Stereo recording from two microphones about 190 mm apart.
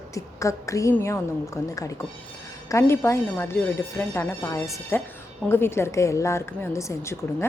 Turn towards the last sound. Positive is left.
turn(degrees=15)  # may be behind; listen again after turning